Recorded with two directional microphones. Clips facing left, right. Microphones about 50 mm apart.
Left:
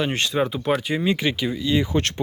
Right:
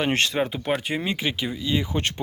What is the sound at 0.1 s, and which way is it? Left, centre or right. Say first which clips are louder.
Speech: right 2 dB; right.